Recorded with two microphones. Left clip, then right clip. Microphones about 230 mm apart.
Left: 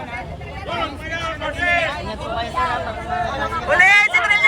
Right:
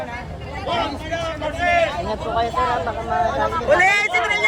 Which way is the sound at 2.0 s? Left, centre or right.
Right.